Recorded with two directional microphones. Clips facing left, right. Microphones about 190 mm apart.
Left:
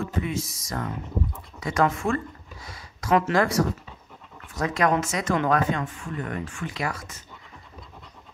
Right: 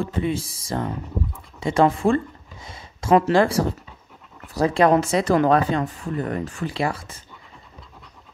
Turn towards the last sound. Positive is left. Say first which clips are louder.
# right 6 dB
turn(degrees=-30)  # may be behind; listen again after turning